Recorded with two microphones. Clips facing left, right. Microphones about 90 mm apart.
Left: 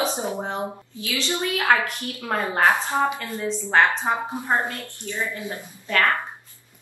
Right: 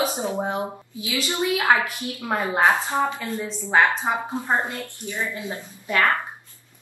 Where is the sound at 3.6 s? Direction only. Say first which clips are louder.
Even; 20° right (ahead or behind).